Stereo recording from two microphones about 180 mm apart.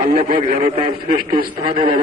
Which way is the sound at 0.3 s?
35° right (ahead or behind).